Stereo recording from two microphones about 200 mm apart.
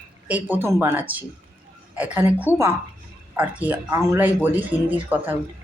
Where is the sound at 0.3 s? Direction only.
10° right (ahead or behind).